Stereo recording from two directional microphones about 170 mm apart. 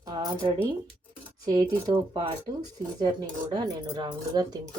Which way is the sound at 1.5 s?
25° right (ahead or behind).